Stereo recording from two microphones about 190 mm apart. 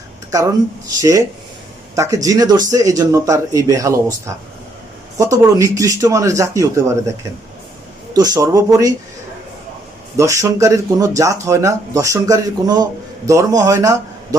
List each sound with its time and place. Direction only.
0.3 s speech: 15° right (ahead or behind)
5.1 s speech: 15° right (ahead or behind)
8.1 s speech: 20° right (ahead or behind)
10.2 s speech: 15° right (ahead or behind)